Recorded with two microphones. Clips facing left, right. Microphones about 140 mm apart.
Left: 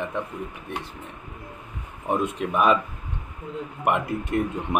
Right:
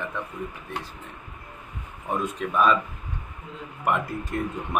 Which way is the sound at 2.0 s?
25° left (ahead or behind).